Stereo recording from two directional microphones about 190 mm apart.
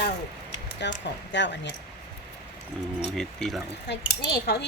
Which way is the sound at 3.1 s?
Centre (ahead or behind).